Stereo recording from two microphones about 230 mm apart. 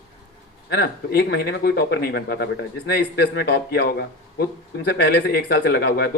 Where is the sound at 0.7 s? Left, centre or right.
Left.